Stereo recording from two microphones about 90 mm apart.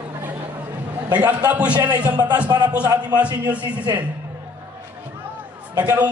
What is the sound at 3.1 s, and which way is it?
Speech, 50° right (ahead or behind).